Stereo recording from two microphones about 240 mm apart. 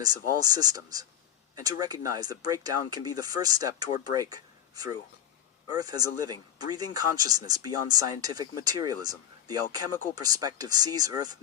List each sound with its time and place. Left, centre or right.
0.0 s speech: centre